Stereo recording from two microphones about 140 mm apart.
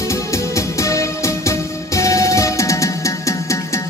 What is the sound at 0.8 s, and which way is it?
Music, 20° left (ahead or behind).